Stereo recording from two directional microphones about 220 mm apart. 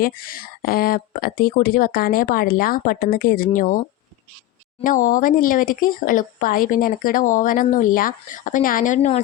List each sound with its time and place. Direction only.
0.0 s speech: 40° left (ahead or behind)